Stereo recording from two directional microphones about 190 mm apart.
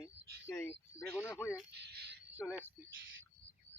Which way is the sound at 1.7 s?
60° right (ahead or behind).